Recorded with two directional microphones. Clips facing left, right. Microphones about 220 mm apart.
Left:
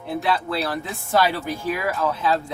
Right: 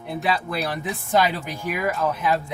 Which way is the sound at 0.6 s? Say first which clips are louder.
Even; 15° right (ahead or behind).